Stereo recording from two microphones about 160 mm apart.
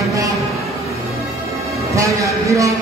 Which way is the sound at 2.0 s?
20° right (ahead or behind).